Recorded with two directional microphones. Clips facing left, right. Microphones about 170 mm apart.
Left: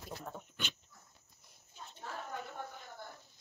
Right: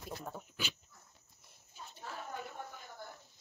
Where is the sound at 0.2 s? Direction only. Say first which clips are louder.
Right 1 dB; 5° right (ahead or behind).